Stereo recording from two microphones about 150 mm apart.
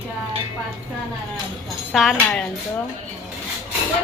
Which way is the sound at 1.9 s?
Centre (ahead or behind).